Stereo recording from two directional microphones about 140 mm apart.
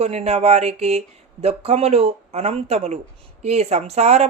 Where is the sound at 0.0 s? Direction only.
50° right (ahead or behind).